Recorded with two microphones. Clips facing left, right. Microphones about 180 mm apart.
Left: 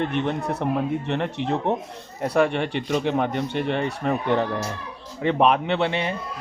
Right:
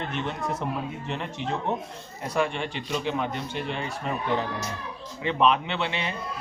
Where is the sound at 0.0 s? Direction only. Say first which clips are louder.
Left 6 dB; 60° left (ahead or behind).